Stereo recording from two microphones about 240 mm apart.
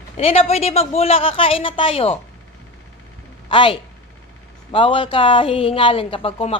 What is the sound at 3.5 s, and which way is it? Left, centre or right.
Speech, left.